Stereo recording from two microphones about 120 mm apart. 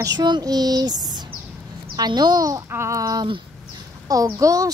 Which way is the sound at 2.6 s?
20° right (ahead or behind).